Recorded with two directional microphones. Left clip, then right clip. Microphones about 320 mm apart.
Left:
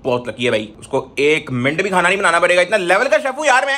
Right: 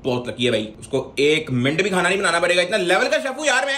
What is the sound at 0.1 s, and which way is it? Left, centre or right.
Speech, centre.